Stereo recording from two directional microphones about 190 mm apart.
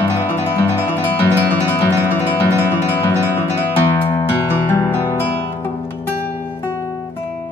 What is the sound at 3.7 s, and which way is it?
Music, 10° left (ahead or behind).